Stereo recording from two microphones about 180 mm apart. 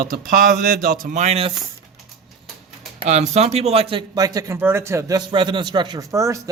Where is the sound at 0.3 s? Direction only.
55° right (ahead or behind); by 1.5 s 35° right (ahead or behind).